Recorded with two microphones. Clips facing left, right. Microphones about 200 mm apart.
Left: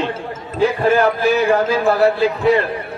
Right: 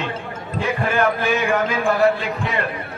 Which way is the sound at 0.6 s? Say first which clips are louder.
Left 6 dB; 35° left (ahead or behind).